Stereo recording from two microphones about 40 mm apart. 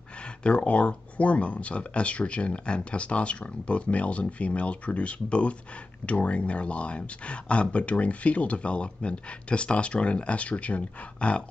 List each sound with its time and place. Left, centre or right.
0.4 s speech: left